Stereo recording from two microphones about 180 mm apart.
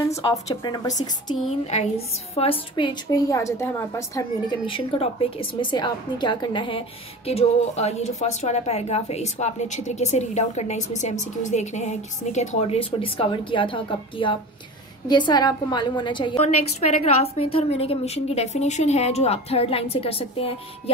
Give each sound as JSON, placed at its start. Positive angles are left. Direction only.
{"t": 0.2, "sound": "a woman's voice", "side_deg": 25}
{"t": 1.7, "sound": "a woman's voice", "side_deg": 35}
{"t": 4.6, "sound": "a woman's voice", "side_deg": 30}
{"t": 16.8, "sound": "a woman's voice", "side_deg": 35}